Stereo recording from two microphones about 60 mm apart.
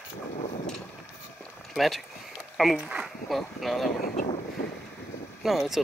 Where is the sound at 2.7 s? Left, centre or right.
Centre.